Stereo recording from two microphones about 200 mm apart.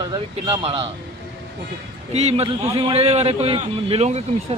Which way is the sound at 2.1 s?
30° right (ahead or behind).